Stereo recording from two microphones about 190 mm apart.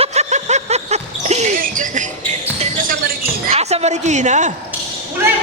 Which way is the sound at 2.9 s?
50° right (ahead or behind).